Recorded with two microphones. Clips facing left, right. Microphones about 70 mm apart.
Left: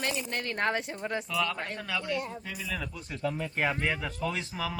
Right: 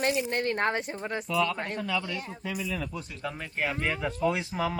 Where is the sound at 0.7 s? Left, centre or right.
Centre.